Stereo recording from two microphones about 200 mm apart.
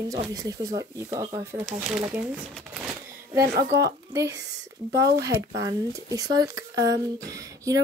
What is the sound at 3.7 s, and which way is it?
Speech, 15° right (ahead or behind).